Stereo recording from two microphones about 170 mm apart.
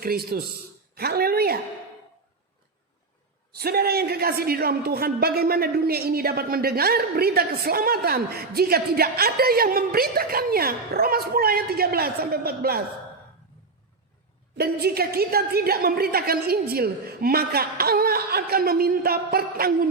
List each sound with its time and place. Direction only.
0.0 s a man's voice: 65° right (ahead or behind)
3.5 s a man's voice: 65° right (ahead or behind)
14.6 s a man's voice: 65° right (ahead or behind)